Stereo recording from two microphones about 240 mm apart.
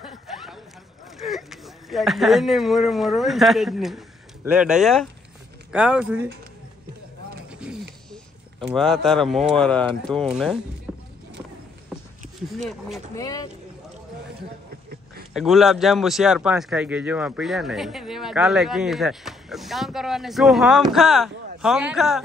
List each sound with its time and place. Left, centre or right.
0.0 s a sound: centre
1.1 s speech: centre
8.6 s speech: centre
10.9 s a sound: centre
12.6 s speech: centre
13.1 s speech: centre
15.3 s speech: centre